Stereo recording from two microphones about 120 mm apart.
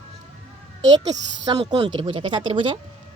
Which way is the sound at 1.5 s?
45° right (ahead or behind).